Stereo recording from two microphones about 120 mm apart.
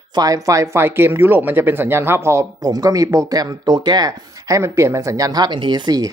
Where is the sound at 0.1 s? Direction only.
30° right (ahead or behind).